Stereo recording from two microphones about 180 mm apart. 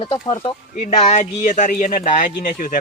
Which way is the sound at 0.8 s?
40° left (ahead or behind).